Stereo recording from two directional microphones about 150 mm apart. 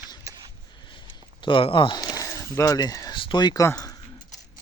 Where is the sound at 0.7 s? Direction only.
30° left (ahead or behind).